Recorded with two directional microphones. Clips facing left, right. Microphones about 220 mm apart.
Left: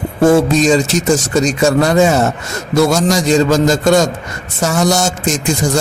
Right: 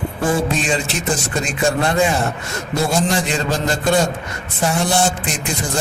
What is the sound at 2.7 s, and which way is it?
Speech, 85° left.